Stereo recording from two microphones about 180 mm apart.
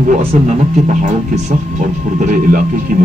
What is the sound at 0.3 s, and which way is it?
Speech, 40° right (ahead or behind).